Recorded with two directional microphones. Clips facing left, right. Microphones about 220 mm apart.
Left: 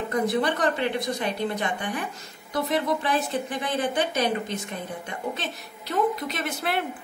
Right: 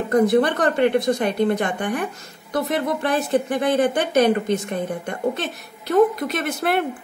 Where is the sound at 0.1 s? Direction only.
50° right (ahead or behind).